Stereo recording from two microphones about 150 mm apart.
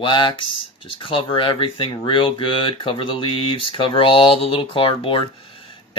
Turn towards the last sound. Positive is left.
turn(degrees=35)  # may be behind; listen again after turning